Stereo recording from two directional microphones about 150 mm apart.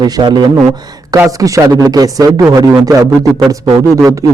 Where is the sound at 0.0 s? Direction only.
30° right (ahead or behind).